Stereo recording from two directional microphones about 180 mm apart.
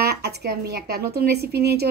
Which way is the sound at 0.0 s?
65° right (ahead or behind).